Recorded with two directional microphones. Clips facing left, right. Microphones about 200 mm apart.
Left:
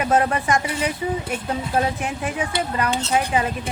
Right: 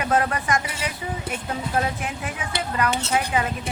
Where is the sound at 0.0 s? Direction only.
25° left (ahead or behind).